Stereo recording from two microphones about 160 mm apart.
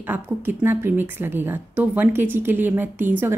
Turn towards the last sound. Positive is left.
turn(degrees=-10)  # may be behind; listen again after turning